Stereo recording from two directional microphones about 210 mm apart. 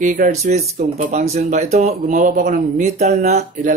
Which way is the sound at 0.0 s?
40° right (ahead or behind).